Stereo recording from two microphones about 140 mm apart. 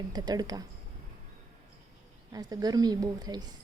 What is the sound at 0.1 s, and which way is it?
Speech, 30° right (ahead or behind).